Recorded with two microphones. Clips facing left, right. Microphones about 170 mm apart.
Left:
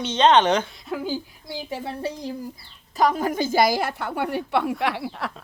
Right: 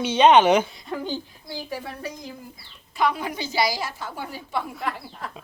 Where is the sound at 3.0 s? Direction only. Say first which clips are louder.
Left 4 dB; 45° left (ahead or behind).